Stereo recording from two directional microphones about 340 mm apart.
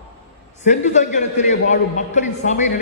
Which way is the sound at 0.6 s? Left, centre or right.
Left.